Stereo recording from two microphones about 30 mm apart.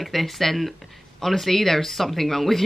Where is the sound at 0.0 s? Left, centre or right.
Centre.